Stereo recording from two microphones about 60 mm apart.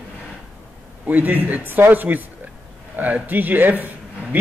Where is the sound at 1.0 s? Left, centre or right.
Right.